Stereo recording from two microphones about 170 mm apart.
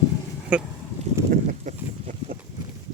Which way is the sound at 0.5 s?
5° right (ahead or behind).